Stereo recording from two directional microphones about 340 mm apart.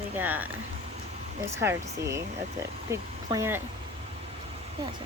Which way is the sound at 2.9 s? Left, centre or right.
Centre.